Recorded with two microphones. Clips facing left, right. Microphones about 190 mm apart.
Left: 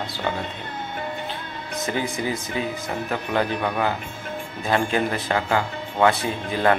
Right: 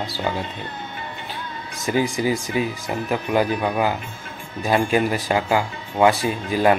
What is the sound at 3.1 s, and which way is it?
Speech, 10° right (ahead or behind).